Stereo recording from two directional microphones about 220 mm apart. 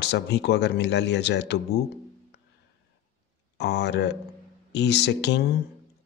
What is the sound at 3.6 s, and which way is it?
Speech, 50° left (ahead or behind).